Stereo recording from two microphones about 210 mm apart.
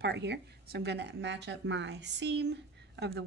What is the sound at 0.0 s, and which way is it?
Speech, 55° right (ahead or behind).